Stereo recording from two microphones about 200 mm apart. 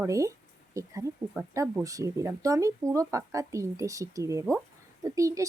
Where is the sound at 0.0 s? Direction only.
15° right (ahead or behind).